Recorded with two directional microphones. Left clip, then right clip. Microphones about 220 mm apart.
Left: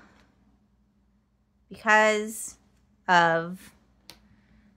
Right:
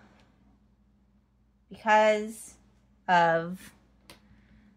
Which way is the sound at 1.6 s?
25° left (ahead or behind).